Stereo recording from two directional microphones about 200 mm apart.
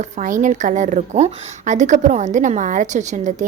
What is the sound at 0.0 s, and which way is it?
A woman's voice, 40° right (ahead or behind).